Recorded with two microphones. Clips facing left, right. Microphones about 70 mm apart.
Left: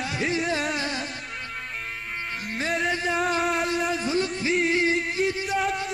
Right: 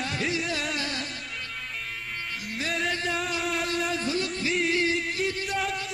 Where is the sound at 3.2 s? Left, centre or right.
Left.